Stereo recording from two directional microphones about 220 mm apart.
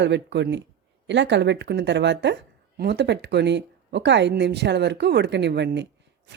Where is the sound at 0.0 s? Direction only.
55° right (ahead or behind).